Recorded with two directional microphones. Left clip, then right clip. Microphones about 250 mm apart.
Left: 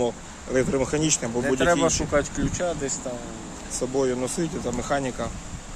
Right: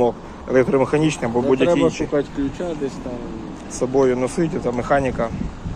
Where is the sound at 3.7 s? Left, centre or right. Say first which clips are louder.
Right 7 dB; centre.